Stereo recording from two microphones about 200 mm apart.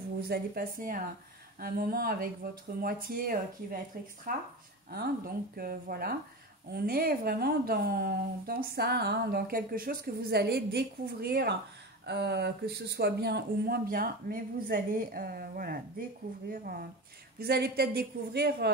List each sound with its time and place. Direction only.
0.3 s a woman's voice: 45° right (ahead or behind)